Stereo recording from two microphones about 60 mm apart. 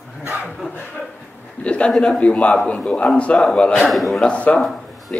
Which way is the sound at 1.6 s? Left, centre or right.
Centre.